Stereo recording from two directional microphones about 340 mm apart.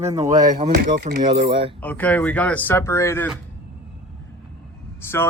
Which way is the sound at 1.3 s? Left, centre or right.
Centre.